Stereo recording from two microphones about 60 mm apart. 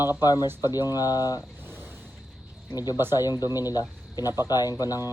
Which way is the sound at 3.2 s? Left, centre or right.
Left.